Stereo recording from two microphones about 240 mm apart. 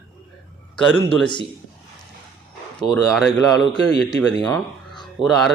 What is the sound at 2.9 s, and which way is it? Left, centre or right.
Speech, centre.